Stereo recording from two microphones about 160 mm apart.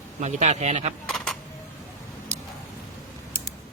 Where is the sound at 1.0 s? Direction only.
5° left (ahead or behind).